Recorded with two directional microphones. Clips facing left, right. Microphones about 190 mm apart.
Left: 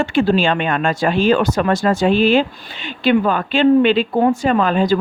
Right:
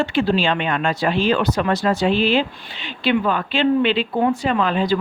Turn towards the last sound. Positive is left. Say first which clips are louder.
# left 4 dB
turn(degrees=45)  # may be behind; listen again after turning